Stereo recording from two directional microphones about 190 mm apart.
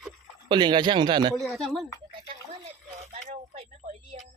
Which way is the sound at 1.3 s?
5° left (ahead or behind).